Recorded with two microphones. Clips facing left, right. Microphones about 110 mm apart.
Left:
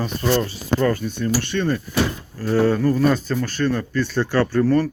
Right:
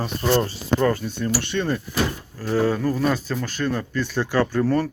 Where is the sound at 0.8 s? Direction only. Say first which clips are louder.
Left 2 dB; 25° right (ahead or behind).